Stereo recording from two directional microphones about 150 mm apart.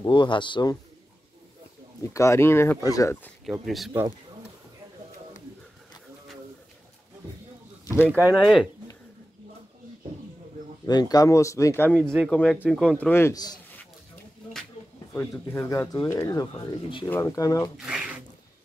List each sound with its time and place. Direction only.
0.0 s speech: 30° left (ahead or behind)
2.1 s speech: 20° left (ahead or behind)
3.6 s speech: centre (ahead or behind)
7.8 s a sound: 20° left (ahead or behind)
8.1 s speech: 10° right (ahead or behind)
10.9 s speech: 25° left (ahead or behind); by 12.6 s 10° left (ahead or behind)
12.6 s speech: centre (ahead or behind)
12.9 s speech: 15° left (ahead or behind)
15.4 s speech: 15° left (ahead or behind)
17.7 s a sound: 5° right (ahead or behind)